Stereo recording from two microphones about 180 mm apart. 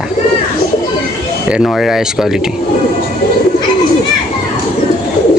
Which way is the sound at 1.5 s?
Centre (ahead or behind).